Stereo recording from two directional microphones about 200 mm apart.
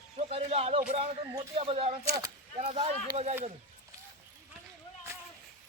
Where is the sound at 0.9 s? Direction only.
30° right (ahead or behind).